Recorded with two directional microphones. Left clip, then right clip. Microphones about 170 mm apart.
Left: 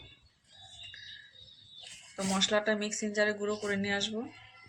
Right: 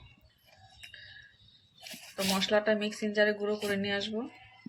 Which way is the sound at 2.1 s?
20° right (ahead or behind).